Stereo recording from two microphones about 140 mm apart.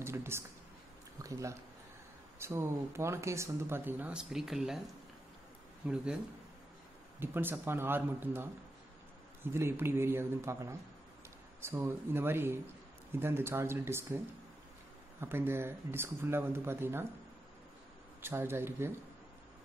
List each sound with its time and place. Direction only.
0.0 s speech: 20° right (ahead or behind); by 4.8 s 5° right (ahead or behind)
5.8 s speech: 5° right (ahead or behind)
7.2 s speech: 15° right (ahead or behind)
18.2 s speech: 15° right (ahead or behind)